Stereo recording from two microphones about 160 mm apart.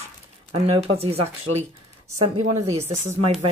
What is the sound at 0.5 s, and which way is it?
Speech, 40° right (ahead or behind).